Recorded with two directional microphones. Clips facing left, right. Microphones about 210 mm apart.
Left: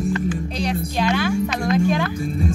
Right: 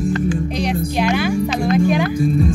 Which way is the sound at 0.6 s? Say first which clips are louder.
Right 1 dB; 15° right (ahead or behind).